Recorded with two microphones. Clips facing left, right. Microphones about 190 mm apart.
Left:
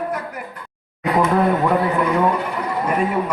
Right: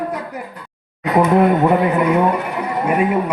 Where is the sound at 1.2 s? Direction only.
20° right (ahead or behind).